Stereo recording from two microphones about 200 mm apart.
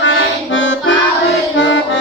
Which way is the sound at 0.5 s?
70° left (ahead or behind).